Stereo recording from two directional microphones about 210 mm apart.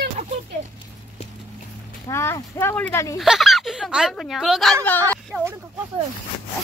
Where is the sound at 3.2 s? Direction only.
Centre (ahead or behind).